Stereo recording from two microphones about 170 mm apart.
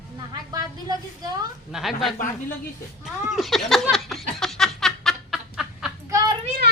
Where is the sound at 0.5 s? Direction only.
25° right (ahead or behind).